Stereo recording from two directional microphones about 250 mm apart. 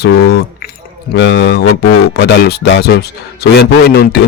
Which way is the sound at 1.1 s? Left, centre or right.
Left.